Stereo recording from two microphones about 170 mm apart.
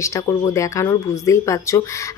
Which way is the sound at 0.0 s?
20° left (ahead or behind).